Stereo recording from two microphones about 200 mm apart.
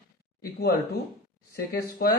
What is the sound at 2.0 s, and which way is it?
Speech, 45° left (ahead or behind).